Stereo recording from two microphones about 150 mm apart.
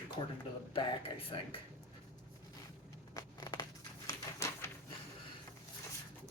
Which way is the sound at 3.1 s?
25° left (ahead or behind).